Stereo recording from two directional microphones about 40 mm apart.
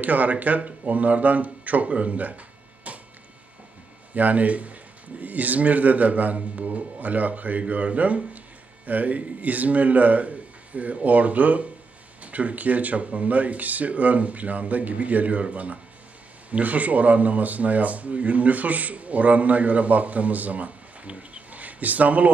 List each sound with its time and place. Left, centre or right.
0.0 s speech: right
4.1 s speech: right
21.1 s a sound: right